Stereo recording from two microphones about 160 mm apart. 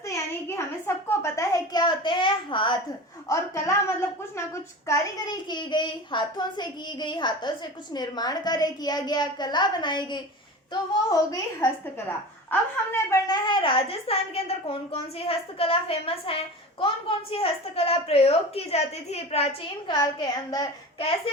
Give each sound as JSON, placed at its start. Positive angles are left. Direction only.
{"t": 0.1, "sound": "a sound", "side_deg": 20}
{"t": 3.2, "sound": "a woman's voice", "side_deg": 20}
{"t": 13.2, "sound": "a woman's voice", "side_deg": 25}
{"t": 19.9, "sound": "a woman's voice", "side_deg": 25}